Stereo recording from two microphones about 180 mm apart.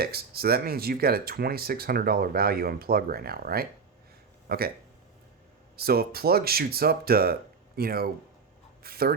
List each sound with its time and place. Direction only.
0.0 s speech: 60° right (ahead or behind)
5.7 s speech: 60° right (ahead or behind)